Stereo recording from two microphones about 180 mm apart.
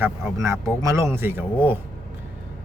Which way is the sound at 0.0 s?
15° right (ahead or behind).